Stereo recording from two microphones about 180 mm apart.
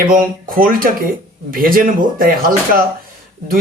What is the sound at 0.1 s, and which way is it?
A man's voice, 50° right (ahead or behind).